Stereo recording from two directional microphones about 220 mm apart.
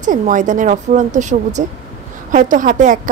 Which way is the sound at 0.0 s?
35° right (ahead or behind).